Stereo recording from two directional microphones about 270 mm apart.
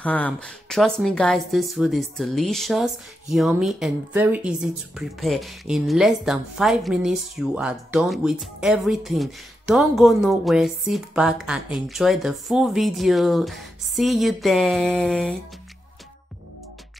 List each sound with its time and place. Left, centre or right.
0.0 s a woman's voice: centre